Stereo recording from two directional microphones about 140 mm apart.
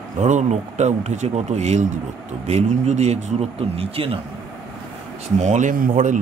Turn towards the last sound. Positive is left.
turn(degrees=-70)  # may be behind; listen again after turning